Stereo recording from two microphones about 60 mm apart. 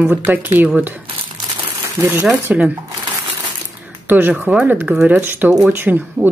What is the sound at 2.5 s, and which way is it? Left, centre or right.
Speech, right.